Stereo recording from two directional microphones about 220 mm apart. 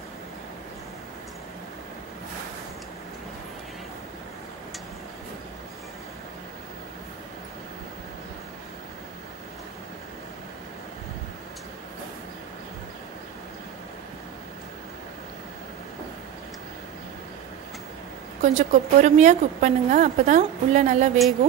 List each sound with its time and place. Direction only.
18.4 s a woman's voice: 35° right (ahead or behind)